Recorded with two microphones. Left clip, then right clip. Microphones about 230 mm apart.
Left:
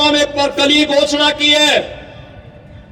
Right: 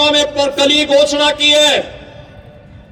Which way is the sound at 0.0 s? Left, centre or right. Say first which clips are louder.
Right 1 dB; right.